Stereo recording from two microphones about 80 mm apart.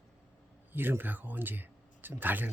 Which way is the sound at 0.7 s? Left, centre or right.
Right.